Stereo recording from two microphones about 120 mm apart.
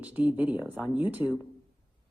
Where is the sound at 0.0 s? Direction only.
10° right (ahead or behind).